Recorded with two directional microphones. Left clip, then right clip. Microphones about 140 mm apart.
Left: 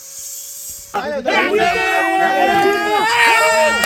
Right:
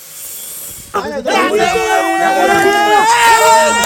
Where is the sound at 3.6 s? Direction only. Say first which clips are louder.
Right 3 dB; 40° right (ahead or behind).